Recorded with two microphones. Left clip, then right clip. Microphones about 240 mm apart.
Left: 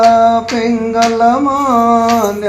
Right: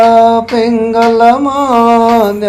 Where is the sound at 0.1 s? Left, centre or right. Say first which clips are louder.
Right 3 dB; right.